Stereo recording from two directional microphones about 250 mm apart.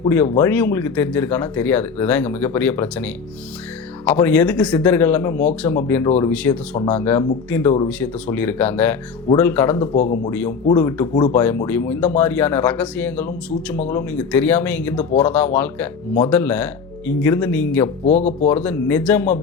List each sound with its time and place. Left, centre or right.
0.1 s speech: centre
9.7 s speech: left
10.7 s speech: centre
18.0 s speech: left
18.4 s speech: centre